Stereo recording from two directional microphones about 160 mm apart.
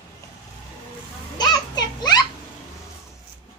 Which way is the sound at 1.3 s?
25° left (ahead or behind).